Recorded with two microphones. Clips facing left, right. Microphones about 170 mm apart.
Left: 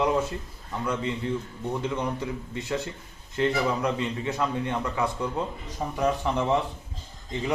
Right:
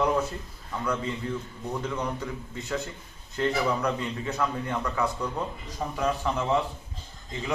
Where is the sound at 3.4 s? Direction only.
20° left (ahead or behind).